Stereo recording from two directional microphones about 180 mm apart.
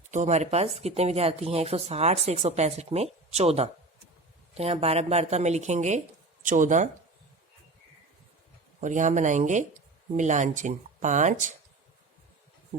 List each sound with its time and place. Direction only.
0.1 s speech: 40° right (ahead or behind)
8.8 s speech: 45° right (ahead or behind)